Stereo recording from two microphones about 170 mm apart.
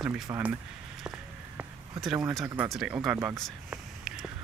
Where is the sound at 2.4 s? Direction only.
15° right (ahead or behind).